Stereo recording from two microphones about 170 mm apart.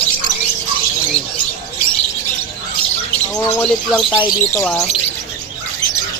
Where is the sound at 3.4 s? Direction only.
10° left (ahead or behind).